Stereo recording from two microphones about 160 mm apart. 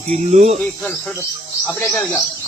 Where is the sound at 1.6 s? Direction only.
15° left (ahead or behind).